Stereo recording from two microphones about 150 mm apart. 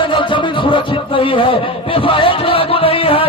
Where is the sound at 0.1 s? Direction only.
35° left (ahead or behind).